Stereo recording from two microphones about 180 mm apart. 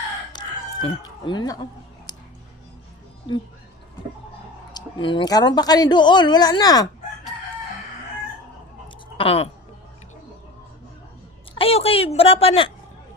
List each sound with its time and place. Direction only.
0.3 s chicken: 25° left (ahead or behind)
2.1 s a sound: 20° left (ahead or behind)
4.7 s speech: 25° left (ahead or behind)
9.1 s speech: 30° left (ahead or behind)
11.5 s a woman's voice: 30° left (ahead or behind)